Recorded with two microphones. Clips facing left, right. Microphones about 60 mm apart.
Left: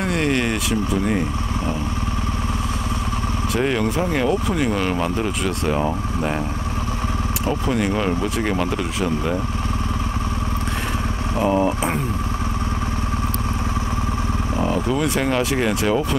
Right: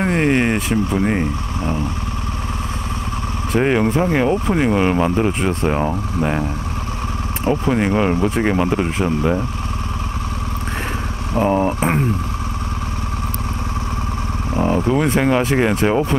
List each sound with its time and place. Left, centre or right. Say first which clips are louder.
0.0 s a sound: right 4 dB; right
3.5 s speech: right 5 dB; right
5.8 s speech: right 2 dB; centre
7.4 s speech: right 5 dB; right
11.3 s vehicle: right 2 dB; right
14.6 s speech: right 5 dB; right